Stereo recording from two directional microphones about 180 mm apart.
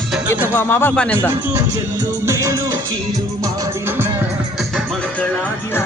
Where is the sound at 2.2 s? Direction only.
15° right (ahead or behind).